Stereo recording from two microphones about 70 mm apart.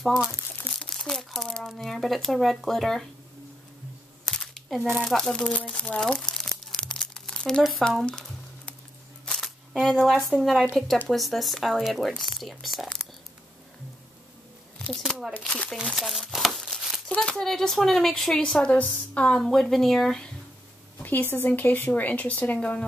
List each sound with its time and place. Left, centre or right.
0.0 s speech: centre
0.7 s crumpling: centre
1.7 s speech: centre
4.3 s a sound: centre
5.0 s speech: centre
5.5 s speech: centre
6.3 s crumpling: centre
8.0 s music: centre
9.4 s speech: centre
15.0 s speech: centre
15.7 s crumpling: centre
17.1 s speech: centre
18.7 s speech: centre
21.0 s speech: left